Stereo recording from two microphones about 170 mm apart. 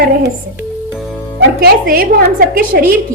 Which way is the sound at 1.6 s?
60° right (ahead or behind).